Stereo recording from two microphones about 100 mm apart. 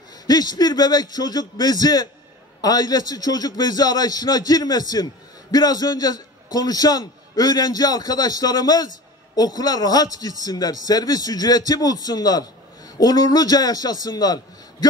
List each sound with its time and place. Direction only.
0.3 s a man's voice: 40° left (ahead or behind)